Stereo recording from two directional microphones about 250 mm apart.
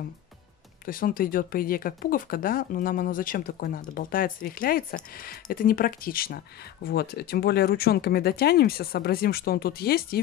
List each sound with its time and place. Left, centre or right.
0.8 s speech: left